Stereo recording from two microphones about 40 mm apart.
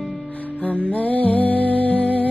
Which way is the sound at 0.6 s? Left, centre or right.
Left.